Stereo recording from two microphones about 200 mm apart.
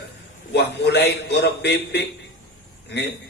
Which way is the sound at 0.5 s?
55° left (ahead or behind).